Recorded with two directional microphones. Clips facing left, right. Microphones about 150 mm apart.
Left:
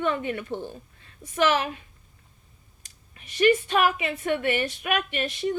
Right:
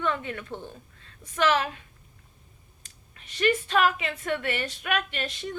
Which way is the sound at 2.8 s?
10° left (ahead or behind).